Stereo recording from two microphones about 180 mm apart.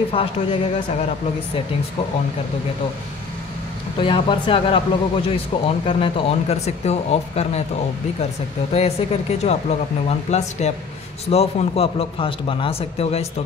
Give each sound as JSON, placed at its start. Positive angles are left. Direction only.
{"t": 0.1, "sound": "speech", "side_deg": 30}
{"t": 4.0, "sound": "speech", "side_deg": 30}
{"t": 8.7, "sound": "speech", "side_deg": 35}